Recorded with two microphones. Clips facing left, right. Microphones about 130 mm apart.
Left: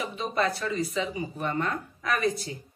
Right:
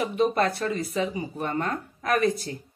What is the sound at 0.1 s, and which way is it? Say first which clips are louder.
Speech: right 4 dB; 55° right (ahead or behind).